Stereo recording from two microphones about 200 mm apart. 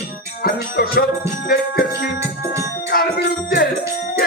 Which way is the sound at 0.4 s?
45° left (ahead or behind).